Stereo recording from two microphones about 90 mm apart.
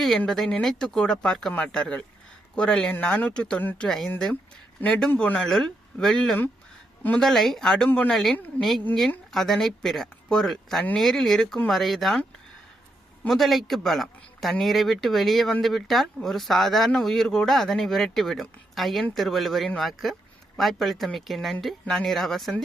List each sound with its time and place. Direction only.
0.3 s speech: 5° left (ahead or behind)
7.9 s speech: 15° left (ahead or behind)
8.1 s speech: 5° left (ahead or behind)
13.2 s speech: centre (ahead or behind)